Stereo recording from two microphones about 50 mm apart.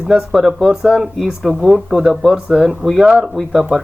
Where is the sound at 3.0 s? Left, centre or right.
Centre.